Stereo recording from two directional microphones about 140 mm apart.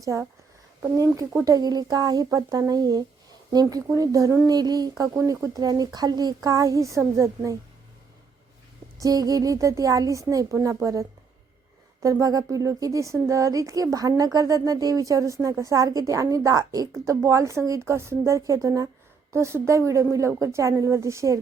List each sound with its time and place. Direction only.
0.0 s a woman's voice: 20° right (ahead or behind)
9.0 s a woman's voice: 25° right (ahead or behind)
12.0 s a woman's voice: 25° right (ahead or behind)